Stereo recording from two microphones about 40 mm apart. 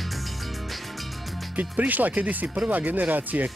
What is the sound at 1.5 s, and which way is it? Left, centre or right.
Speech, right.